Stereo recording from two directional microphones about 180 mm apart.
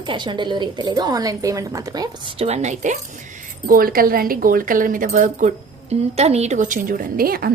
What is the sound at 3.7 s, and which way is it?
A woman's voice, 55° right (ahead or behind).